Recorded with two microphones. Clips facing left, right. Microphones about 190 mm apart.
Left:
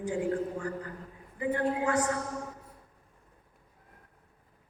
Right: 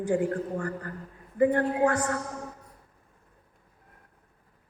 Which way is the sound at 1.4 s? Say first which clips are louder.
Right 7 dB; 50° right (ahead or behind).